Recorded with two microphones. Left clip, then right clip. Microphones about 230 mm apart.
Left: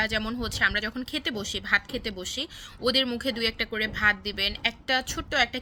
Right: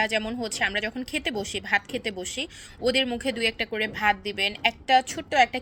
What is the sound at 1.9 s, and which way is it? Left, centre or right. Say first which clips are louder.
Speech: right 2 dB; left.